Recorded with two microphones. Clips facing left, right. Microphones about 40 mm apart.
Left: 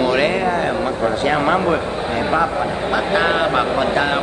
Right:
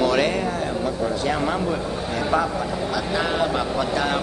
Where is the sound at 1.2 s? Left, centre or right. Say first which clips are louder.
Left 8 dB; left.